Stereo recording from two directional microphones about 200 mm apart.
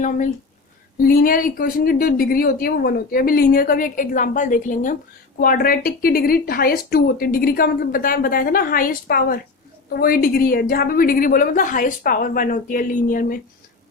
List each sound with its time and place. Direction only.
0.9 s speech: 45° left (ahead or behind)